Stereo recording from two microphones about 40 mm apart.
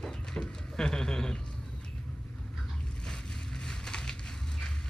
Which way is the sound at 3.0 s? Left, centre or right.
Centre.